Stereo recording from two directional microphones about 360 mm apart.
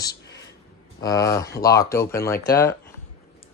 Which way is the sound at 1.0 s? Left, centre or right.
Centre.